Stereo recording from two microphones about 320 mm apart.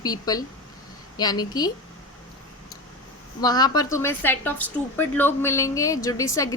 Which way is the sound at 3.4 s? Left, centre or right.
Centre.